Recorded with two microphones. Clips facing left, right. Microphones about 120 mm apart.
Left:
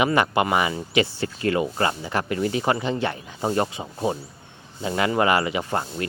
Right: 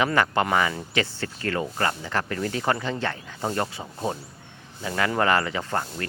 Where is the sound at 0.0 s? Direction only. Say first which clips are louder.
Left 2 dB; 15° left (ahead or behind).